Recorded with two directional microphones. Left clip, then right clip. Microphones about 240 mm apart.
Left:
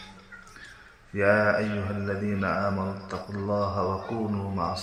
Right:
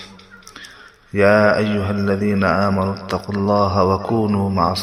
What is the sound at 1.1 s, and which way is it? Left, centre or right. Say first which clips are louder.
Speech: right 9 dB; right.